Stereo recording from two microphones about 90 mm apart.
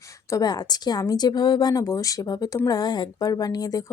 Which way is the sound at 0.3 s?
45° left (ahead or behind).